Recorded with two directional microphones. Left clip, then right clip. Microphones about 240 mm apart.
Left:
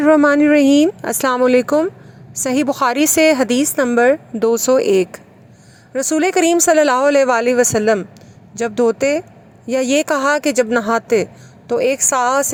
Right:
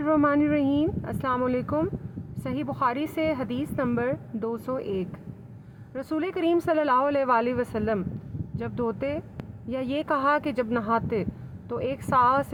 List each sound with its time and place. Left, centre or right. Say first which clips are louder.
0.0 s speech: left 11 dB; left